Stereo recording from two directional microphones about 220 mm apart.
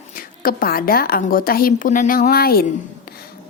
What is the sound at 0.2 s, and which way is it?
A woman's voice, 40° left (ahead or behind).